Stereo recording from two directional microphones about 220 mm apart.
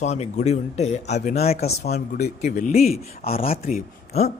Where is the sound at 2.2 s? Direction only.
40° left (ahead or behind).